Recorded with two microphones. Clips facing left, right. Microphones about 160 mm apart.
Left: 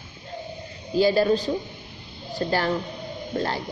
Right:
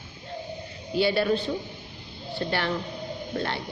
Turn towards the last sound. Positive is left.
turn(degrees=40)  # may be behind; listen again after turning